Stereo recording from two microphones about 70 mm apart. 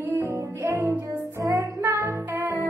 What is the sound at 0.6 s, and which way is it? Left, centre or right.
Music, right.